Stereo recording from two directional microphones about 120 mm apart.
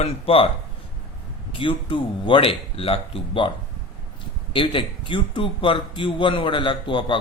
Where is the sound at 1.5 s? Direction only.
45° left (ahead or behind).